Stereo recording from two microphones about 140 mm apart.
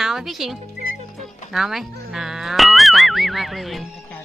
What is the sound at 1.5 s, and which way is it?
Speech, centre (ahead or behind).